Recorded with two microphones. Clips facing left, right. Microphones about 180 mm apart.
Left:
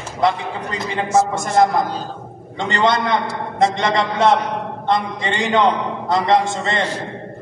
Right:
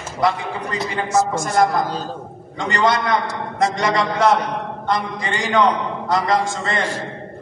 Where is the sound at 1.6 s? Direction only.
25° left (ahead or behind).